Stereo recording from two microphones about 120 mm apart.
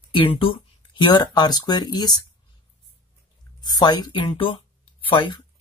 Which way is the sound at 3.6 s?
35° left (ahead or behind).